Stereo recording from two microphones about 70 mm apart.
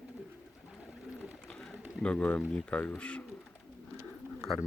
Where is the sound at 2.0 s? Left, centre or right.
Centre.